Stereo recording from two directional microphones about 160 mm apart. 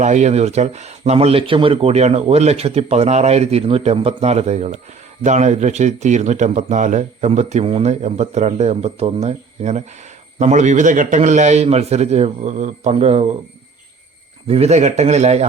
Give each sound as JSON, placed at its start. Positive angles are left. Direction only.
{"t": 0.0, "sound": "speech", "side_deg": -45}
{"t": 14.4, "sound": "speech", "side_deg": -40}